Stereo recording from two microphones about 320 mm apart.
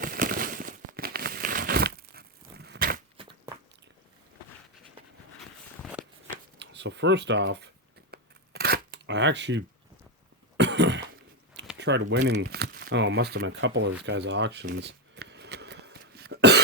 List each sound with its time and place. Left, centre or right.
0.0 s crumpling: right
3.2 s crunch: centre
5.4 s walk: centre
6.3 s shuffling cards: right
8.1 s a sound: right
10.6 s cough: right
11.8 s speech: right
14.0 s a sound: right